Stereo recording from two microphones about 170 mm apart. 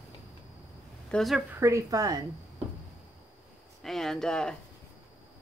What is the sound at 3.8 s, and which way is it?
Speech, centre (ahead or behind).